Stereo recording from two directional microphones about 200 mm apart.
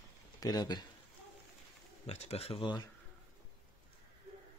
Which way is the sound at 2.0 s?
30° left (ahead or behind).